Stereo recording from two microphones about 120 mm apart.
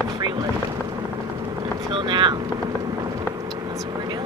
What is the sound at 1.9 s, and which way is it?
Speech, 40° right (ahead or behind).